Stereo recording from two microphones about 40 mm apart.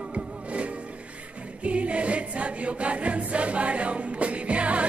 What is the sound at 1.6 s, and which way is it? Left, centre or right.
Music, right.